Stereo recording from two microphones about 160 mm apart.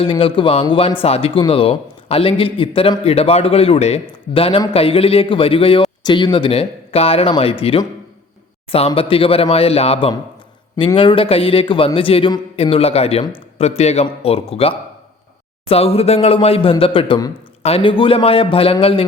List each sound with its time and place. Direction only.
0.0 s a man's voice: 35° left (ahead or behind)
9.0 s a man's voice: 35° left (ahead or behind)